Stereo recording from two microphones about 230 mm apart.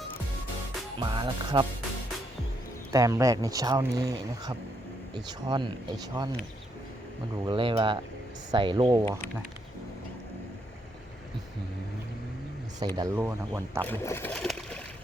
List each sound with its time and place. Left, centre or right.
0.9 s speech: right
2.9 s speech: centre
7.4 s speech: right
13.0 s speech: centre
13.8 s speech: centre